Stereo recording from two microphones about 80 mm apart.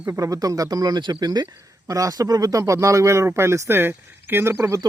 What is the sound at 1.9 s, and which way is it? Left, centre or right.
A man's voice, right.